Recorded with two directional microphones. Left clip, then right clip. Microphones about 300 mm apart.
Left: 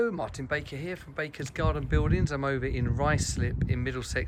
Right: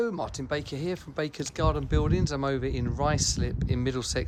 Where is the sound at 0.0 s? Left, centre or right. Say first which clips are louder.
Even; centre.